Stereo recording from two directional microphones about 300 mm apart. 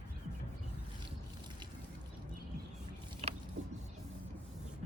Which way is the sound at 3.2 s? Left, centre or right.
Right.